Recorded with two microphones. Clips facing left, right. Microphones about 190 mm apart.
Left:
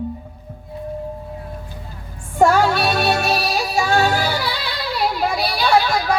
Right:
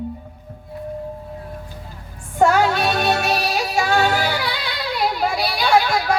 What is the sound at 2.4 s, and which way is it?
Music, 10° left (ahead or behind).